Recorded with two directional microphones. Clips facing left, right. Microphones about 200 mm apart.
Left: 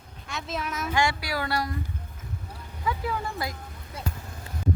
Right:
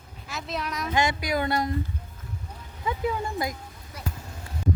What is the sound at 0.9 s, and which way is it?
Speech, 20° right (ahead or behind).